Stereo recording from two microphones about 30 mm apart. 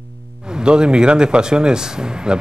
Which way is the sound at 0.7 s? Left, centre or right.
Right.